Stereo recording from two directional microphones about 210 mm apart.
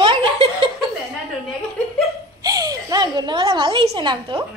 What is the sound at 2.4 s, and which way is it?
A woman's voice, 15° right (ahead or behind).